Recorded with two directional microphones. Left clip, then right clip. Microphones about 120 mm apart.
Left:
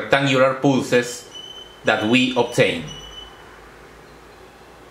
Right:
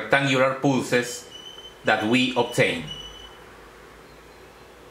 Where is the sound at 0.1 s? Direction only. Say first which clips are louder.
Left 4 dB; centre (ahead or behind).